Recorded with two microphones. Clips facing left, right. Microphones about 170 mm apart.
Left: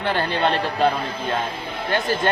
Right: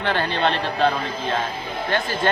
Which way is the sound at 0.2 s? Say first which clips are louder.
Left 1 dB; 40° left (ahead or behind).